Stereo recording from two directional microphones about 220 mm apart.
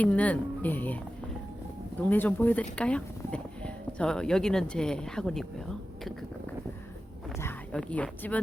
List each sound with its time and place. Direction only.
0.0 s speech: 5° left (ahead or behind)
2.0 s speech: 10° left (ahead or behind)
7.3 s speech: 10° left (ahead or behind)